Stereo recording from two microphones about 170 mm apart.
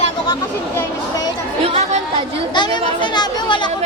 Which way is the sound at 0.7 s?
20° left (ahead or behind).